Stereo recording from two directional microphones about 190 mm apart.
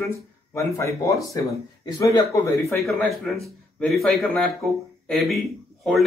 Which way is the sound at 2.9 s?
Centre (ahead or behind).